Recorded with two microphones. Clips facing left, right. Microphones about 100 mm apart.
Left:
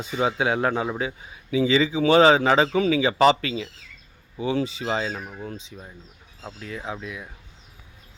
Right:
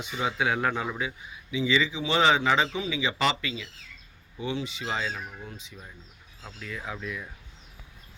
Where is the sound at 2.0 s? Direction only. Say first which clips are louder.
Left 9 dB; 50° left (ahead or behind).